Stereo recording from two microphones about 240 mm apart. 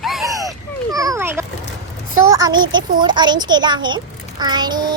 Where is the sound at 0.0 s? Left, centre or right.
Centre.